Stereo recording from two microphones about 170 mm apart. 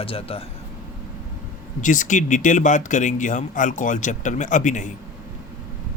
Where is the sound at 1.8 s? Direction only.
50° left (ahead or behind).